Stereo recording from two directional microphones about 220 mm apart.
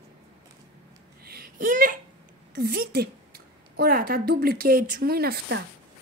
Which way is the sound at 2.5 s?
45° right (ahead or behind).